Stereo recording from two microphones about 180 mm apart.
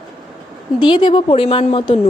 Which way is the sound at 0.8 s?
25° left (ahead or behind).